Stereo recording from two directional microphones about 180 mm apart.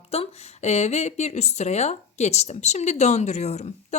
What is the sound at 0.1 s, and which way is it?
Speech, 35° left (ahead or behind).